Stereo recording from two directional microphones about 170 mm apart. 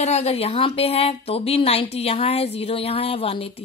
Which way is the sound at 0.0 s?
40° left (ahead or behind).